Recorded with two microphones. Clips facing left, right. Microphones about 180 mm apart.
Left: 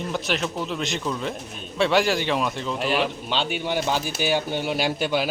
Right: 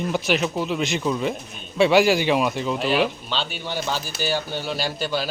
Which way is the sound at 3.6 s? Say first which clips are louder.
Left 3 dB; 15° left (ahead or behind).